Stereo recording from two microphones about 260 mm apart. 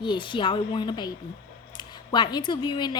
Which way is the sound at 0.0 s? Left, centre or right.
Centre.